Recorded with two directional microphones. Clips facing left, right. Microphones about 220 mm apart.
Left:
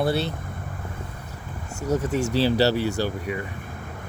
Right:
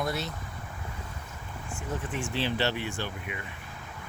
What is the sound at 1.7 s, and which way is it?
Speech, 40° left (ahead or behind).